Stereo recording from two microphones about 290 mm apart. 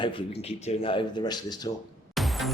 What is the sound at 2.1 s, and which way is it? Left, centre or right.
Music, centre.